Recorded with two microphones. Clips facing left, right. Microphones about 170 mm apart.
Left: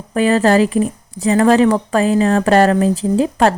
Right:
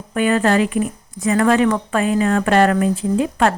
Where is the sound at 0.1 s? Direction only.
35° left (ahead or behind).